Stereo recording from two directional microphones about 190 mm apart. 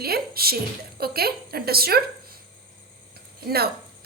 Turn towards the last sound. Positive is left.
turn(degrees=-55)  # may be behind; listen again after turning